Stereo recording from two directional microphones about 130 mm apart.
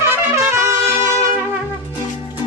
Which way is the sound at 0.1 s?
20° right (ahead or behind).